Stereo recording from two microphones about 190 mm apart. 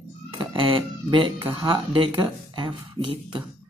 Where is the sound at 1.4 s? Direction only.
15° right (ahead or behind).